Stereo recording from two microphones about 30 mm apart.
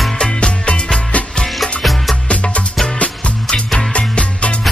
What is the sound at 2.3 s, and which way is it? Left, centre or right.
Music, left.